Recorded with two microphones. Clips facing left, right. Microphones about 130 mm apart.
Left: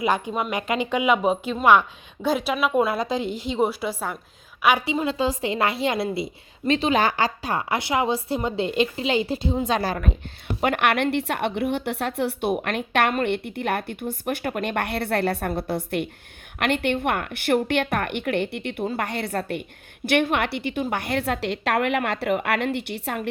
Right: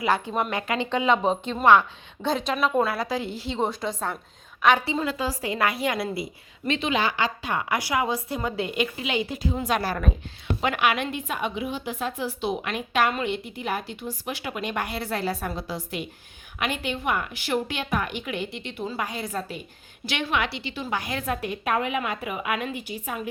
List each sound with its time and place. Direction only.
0.5 s a woman's voice: 15° left (ahead or behind)
5.0 s a woman's voice: 25° left (ahead or behind)
6.7 s a woman's voice: 35° left (ahead or behind)
10.6 s a woman's voice: 55° left (ahead or behind); by 23.3 s 75° left (ahead or behind)